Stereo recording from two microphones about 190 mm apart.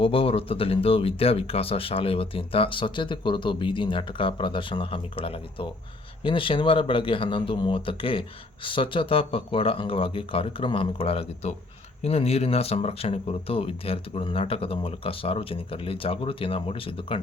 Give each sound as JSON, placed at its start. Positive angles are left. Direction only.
{"t": 0.0, "sound": "speech", "side_deg": 30}